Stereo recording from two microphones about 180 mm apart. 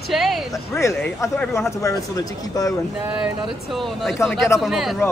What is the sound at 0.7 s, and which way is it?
Speech, 15° left (ahead or behind).